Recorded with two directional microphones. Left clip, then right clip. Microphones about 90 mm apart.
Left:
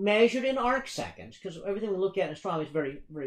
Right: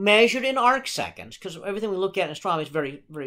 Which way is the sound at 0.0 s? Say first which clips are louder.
Right 6 dB; 25° right (ahead or behind).